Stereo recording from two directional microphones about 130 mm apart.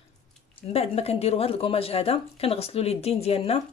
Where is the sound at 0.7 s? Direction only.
50° left (ahead or behind).